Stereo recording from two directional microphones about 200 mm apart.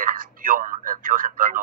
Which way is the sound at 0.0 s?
45° right (ahead or behind).